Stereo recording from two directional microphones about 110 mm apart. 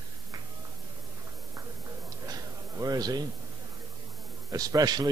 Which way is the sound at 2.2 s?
35° right (ahead or behind).